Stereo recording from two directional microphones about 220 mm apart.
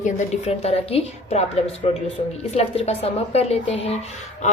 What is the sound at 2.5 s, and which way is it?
A woman's voice, 25° left (ahead or behind).